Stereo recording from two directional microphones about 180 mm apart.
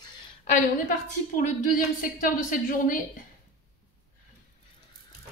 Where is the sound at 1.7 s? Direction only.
50° left (ahead or behind).